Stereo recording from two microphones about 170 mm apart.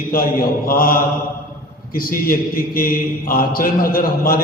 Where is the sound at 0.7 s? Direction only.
55° left (ahead or behind).